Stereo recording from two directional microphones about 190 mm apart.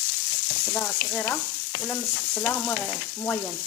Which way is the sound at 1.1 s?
10° left (ahead or behind).